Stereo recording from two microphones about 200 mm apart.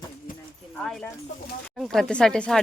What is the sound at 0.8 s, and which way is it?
Speech, centre (ahead or behind).